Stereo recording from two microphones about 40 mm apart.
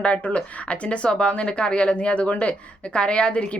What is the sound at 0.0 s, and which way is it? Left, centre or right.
A woman's voice, left.